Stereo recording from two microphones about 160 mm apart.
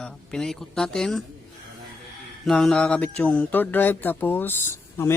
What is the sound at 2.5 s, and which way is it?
Speech, 5° left (ahead or behind).